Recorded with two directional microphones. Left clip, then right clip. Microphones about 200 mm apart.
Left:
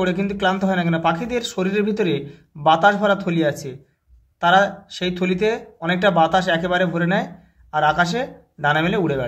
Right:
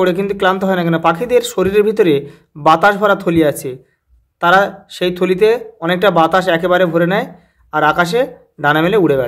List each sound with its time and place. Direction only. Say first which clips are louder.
0.0 s speech: right 7 dB; 35° right (ahead or behind)